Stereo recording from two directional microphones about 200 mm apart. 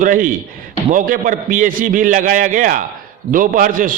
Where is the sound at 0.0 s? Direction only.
40° right (ahead or behind).